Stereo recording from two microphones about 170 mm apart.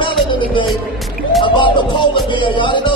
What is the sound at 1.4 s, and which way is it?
Music, 30° left (ahead or behind).